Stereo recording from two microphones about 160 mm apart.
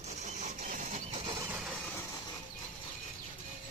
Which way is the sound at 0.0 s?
45° right (ahead or behind).